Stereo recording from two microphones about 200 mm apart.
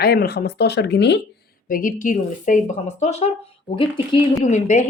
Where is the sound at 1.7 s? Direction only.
40° left (ahead or behind).